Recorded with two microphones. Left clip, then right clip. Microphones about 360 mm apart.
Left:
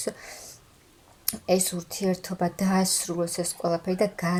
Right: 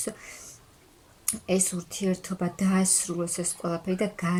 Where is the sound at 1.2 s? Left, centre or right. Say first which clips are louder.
Left 3 dB; centre.